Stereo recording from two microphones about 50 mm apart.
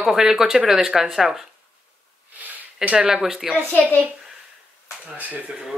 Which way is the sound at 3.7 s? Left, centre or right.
Left.